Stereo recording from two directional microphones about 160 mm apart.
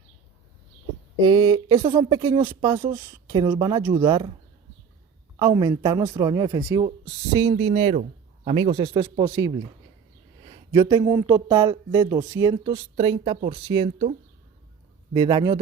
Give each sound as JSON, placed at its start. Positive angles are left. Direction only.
{"t": 1.2, "sound": "speech", "side_deg": -25}
{"t": 5.4, "sound": "speech", "side_deg": -30}
{"t": 9.2, "sound": "speech", "side_deg": -15}
{"t": 10.4, "sound": "a sound", "side_deg": -30}
{"t": 11.1, "sound": "speech", "side_deg": -15}
{"t": 12.7, "sound": "speech", "side_deg": -40}
{"t": 15.1, "sound": "speech", "side_deg": -30}